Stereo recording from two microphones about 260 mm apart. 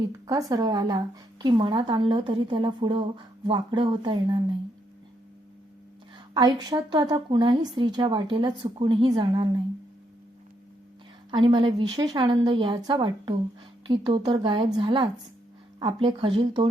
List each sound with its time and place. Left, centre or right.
0.0 s a woman's voice: centre
6.3 s a woman's voice: centre
11.3 s speech: centre